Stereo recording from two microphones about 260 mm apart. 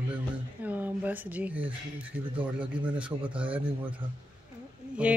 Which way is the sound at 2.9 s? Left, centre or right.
Centre.